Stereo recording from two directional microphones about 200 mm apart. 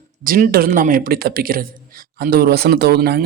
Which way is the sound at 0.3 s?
45° right (ahead or behind).